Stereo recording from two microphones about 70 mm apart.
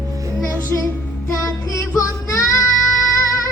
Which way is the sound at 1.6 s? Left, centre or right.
Left.